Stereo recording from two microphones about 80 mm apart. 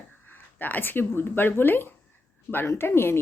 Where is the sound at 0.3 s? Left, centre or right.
Left.